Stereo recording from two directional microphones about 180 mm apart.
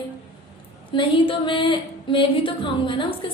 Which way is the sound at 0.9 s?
30° left (ahead or behind).